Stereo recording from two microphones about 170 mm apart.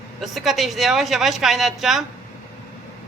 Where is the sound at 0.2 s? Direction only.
Centre (ahead or behind).